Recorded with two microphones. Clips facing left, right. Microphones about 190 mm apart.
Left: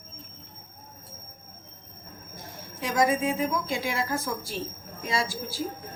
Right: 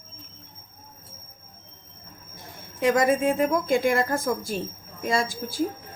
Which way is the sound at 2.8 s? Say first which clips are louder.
Right 4 dB; 55° right (ahead or behind).